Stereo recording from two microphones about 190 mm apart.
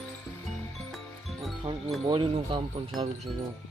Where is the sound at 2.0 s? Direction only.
25° right (ahead or behind).